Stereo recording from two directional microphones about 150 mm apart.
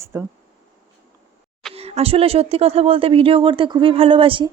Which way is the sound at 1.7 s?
40° right (ahead or behind).